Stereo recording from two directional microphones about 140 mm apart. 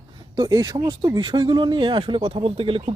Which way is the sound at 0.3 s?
25° right (ahead or behind).